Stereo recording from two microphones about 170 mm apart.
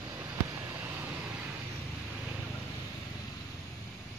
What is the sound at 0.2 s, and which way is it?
Vehicle, 15° right (ahead or behind).